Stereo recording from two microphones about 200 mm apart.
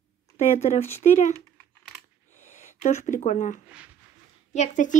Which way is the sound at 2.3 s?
35° left (ahead or behind).